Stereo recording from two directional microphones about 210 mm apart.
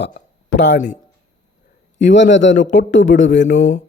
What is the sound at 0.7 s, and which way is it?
Speech, 35° left (ahead or behind).